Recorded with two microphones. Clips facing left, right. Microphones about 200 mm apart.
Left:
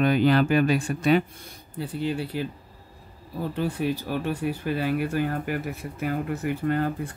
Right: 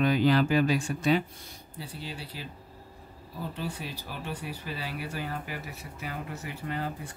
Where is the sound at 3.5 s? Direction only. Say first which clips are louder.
Left 13 dB; 55° left (ahead or behind).